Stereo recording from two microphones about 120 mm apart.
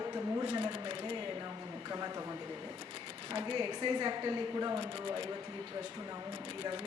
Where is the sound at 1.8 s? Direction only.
30° right (ahead or behind).